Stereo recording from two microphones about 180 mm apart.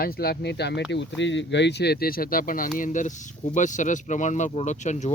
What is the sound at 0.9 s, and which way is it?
Speech, 80° left.